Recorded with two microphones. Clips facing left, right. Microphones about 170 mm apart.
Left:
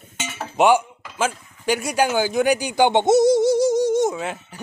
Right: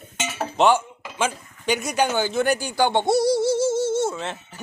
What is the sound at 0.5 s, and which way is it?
Speech, 10° left (ahead or behind).